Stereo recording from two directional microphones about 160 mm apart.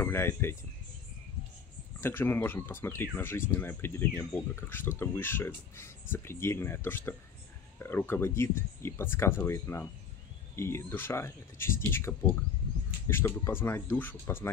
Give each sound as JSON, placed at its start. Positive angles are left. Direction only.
{"t": 0.0, "sound": "speech", "side_deg": 15}
{"t": 2.0, "sound": "speech", "side_deg": 15}